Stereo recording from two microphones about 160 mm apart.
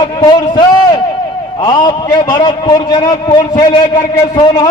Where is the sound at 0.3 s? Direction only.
25° left (ahead or behind).